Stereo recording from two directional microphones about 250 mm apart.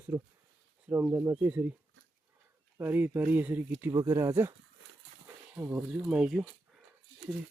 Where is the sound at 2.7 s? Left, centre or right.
Centre.